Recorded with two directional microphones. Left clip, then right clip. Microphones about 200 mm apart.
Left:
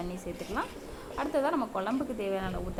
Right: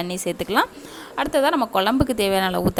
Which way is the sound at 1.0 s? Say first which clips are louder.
Right 10 dB; 40° right (ahead or behind).